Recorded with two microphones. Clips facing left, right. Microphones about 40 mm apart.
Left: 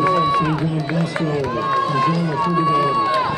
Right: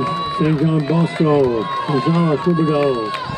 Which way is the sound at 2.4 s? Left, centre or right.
Left.